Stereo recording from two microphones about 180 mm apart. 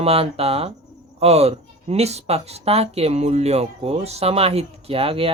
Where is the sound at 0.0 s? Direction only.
35° right (ahead or behind).